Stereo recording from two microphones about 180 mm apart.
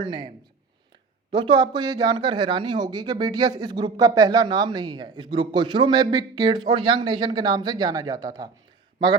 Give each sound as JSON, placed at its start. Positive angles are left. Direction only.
{"t": 0.0, "sound": "speech", "side_deg": -25}
{"t": 1.3, "sound": "speech", "side_deg": -25}